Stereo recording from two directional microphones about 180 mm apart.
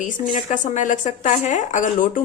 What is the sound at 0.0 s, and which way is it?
Speech, 45° left (ahead or behind).